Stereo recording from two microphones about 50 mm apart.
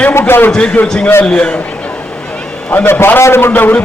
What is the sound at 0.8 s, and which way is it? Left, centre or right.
Speech, left.